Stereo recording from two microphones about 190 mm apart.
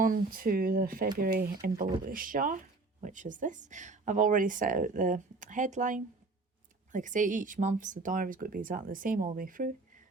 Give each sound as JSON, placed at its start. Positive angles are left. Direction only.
{"t": 0.0, "sound": "speech", "side_deg": -50}